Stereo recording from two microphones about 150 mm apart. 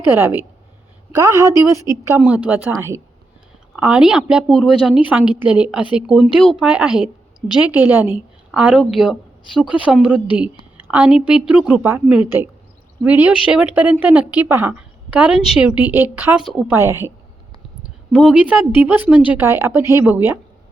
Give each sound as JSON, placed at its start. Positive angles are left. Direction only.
{"t": 0.1, "sound": "a woman's voice", "side_deg": -15}
{"t": 18.1, "sound": "a woman's voice", "side_deg": -5}